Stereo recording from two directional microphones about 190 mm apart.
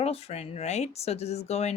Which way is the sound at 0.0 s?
35° left (ahead or behind).